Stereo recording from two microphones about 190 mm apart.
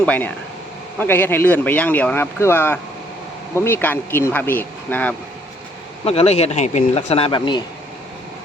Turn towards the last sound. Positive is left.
turn(degrees=25)  # may be behind; listen again after turning